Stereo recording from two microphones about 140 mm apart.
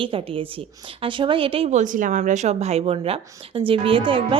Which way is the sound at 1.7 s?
65° right (ahead or behind).